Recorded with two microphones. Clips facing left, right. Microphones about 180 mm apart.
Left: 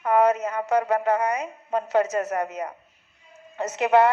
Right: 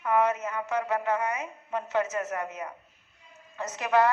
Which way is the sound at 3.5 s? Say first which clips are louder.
Left 6 dB; 30° left (ahead or behind).